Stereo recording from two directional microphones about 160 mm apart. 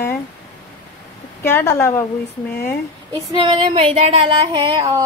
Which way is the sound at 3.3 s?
35° right (ahead or behind).